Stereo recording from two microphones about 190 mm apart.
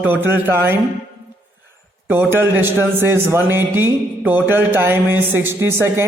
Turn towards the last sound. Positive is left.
turn(degrees=-15)  # may be behind; listen again after turning